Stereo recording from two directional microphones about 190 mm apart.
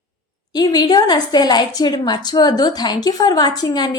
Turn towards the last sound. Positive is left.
turn(degrees=20)  # may be behind; listen again after turning